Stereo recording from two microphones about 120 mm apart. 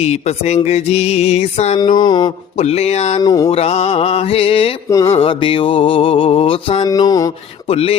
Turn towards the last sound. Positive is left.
turn(degrees=55)  # may be behind; listen again after turning